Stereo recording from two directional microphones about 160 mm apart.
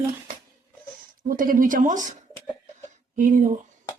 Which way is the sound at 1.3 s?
60° right (ahead or behind).